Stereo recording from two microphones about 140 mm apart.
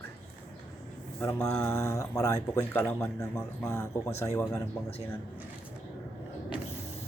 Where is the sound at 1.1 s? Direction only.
20° left (ahead or behind).